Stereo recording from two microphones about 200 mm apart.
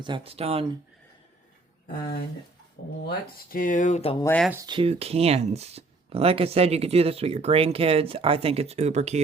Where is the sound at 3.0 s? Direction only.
45° left (ahead or behind).